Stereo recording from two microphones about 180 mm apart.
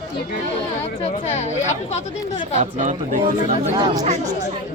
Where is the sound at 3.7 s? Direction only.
25° right (ahead or behind).